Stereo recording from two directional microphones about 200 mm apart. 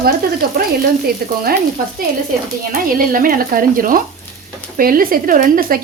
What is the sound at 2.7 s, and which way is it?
Speech, 45° right (ahead or behind).